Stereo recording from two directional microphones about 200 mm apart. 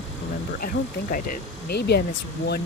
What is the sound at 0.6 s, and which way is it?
Speech, 45° left (ahead or behind).